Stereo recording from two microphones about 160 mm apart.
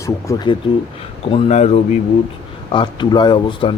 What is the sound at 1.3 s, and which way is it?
Speech, 45° left (ahead or behind).